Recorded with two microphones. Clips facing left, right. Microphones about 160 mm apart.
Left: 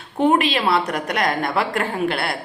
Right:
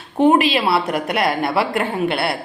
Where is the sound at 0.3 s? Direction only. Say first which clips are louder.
Right 2 dB; 5° right (ahead or behind).